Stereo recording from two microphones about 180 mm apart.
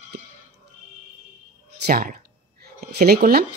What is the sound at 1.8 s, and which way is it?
Speech, 55° right (ahead or behind).